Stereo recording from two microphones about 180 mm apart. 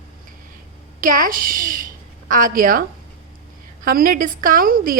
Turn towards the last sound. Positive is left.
turn(degrees=-50)  # may be behind; listen again after turning